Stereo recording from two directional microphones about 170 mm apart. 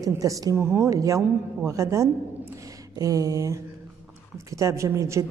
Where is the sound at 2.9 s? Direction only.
20° right (ahead or behind).